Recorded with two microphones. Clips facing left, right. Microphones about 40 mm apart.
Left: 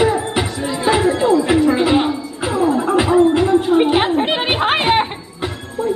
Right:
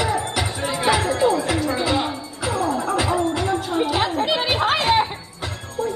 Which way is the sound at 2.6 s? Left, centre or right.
Left.